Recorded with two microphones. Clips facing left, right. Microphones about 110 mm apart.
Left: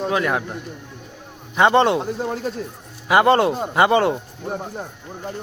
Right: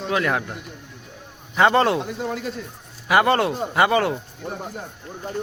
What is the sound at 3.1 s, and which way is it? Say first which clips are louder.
Speech: left 3 dB; 25° left (ahead or behind).